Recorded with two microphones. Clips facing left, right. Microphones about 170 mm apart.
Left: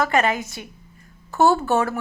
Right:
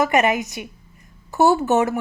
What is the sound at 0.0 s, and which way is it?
A woman's voice, 20° right (ahead or behind).